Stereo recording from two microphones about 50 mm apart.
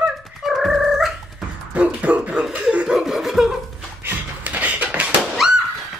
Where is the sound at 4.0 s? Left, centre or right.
Right.